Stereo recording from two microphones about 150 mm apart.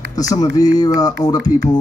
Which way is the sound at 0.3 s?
25° left (ahead or behind).